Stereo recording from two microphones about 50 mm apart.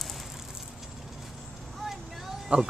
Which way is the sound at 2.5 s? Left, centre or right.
Right.